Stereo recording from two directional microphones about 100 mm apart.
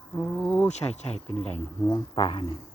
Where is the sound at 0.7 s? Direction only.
90° left.